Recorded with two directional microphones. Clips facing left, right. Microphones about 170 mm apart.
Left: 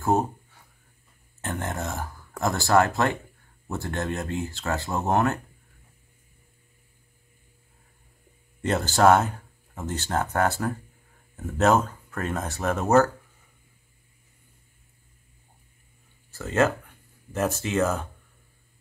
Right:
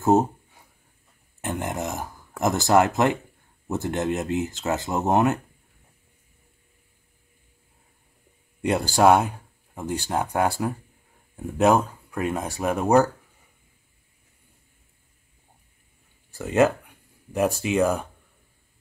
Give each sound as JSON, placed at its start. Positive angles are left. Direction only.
{"t": 0.0, "sound": "a sound", "side_deg": -20}
{"t": 1.4, "sound": "speech", "side_deg": -15}
{"t": 8.6, "sound": "speech", "side_deg": -15}
{"t": 16.3, "sound": "speech", "side_deg": -15}